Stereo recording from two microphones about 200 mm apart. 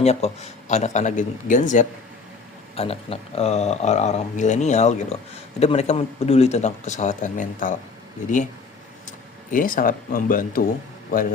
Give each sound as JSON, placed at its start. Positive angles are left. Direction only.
{"t": 0.0, "sound": "speech", "side_deg": 30}
{"t": 9.0, "sound": "speech", "side_deg": 40}